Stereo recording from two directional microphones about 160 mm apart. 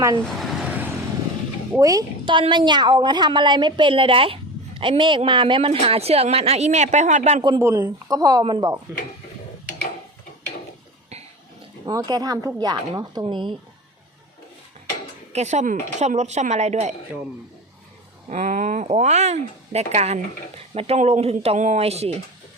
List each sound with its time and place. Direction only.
0.3 s vehicle: centre (ahead or behind)
1.7 s speech: 20° right (ahead or behind); by 7.4 s 50° right (ahead or behind)
7.6 s speech: 20° right (ahead or behind)
11.9 s speech: 25° right (ahead or behind)
15.3 s speech: 45° right (ahead or behind)
18.3 s speech: 50° right (ahead or behind)